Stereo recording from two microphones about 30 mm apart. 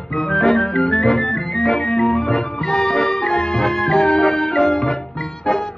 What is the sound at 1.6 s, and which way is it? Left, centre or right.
Organ, left.